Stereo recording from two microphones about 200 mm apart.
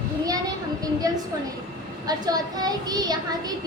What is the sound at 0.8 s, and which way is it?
Speech, 20° right (ahead or behind).